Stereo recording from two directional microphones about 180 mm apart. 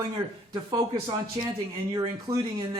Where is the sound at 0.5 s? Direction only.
25° right (ahead or behind).